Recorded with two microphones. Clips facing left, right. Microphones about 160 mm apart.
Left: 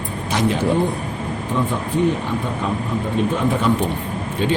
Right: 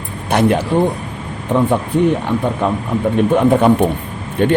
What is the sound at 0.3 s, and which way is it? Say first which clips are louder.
Speech: right 6 dB; 60° right (ahead or behind).